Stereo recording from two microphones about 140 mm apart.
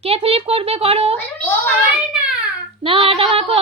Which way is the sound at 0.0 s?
45° right (ahead or behind).